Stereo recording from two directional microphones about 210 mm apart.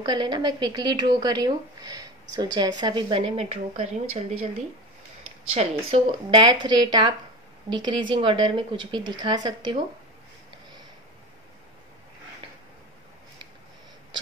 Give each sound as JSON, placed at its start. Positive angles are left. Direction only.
{"t": 0.0, "sound": "speech", "side_deg": -20}
{"t": 5.5, "sound": "speech", "side_deg": -30}